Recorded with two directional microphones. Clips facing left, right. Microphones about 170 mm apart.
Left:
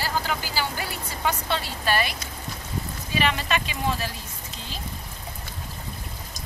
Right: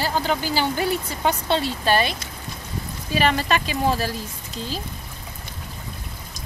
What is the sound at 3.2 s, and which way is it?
Speech, 40° right (ahead or behind).